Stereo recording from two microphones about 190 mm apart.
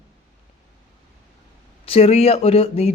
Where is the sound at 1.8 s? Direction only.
30° left (ahead or behind).